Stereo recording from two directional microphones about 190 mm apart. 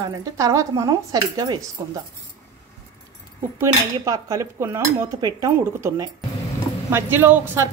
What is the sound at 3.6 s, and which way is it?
Speech, 15° right (ahead or behind).